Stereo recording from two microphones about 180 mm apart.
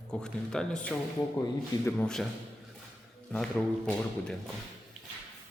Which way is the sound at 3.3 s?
5° left (ahead or behind).